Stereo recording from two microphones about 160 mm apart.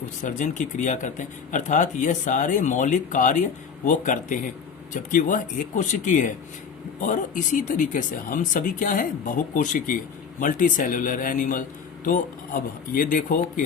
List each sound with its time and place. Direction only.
0.2 s speech: 50° left (ahead or behind)